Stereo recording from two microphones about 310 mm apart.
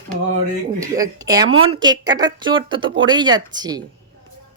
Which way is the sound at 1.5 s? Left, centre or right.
Right.